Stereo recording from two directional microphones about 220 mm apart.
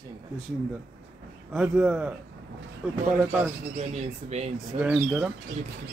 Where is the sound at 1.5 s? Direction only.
5° right (ahead or behind).